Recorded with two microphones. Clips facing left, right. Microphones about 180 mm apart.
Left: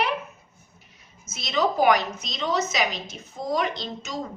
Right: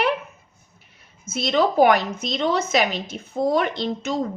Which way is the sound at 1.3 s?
55° right (ahead or behind).